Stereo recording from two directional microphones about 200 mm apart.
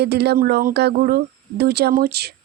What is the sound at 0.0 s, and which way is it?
Speech, 55° right (ahead or behind).